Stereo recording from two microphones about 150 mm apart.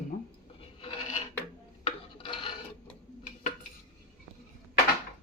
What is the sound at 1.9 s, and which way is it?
Dishes, 35° left (ahead or behind).